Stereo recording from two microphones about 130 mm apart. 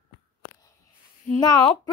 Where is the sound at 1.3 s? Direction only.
30° left (ahead or behind).